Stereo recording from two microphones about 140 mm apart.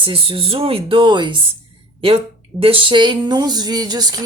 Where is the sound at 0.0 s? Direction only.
40° right (ahead or behind).